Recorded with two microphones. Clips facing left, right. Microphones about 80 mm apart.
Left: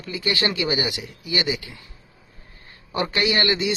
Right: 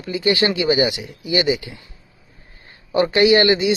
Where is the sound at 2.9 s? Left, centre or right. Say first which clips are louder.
Right 9 dB; right.